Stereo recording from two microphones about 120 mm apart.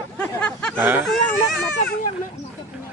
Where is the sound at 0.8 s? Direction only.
15° right (ahead or behind).